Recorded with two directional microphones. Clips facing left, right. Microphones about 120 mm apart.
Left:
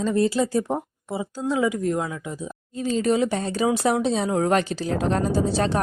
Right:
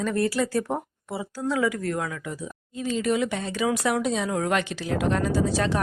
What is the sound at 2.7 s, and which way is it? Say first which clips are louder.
A woman's voice: left 3 dB; 35° left (ahead or behind).